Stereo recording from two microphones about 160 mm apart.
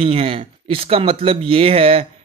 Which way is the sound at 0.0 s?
35° right (ahead or behind).